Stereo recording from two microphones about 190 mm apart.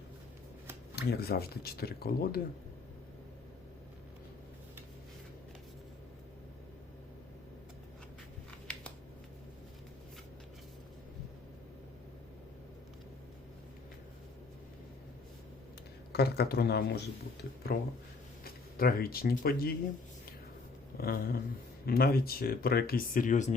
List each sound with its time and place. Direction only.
0.9 s speech: 55° left (ahead or behind)
8.4 s a sound: 5° left (ahead or behind)
16.1 s speech: 55° left (ahead or behind)
21.0 s speech: 50° left (ahead or behind)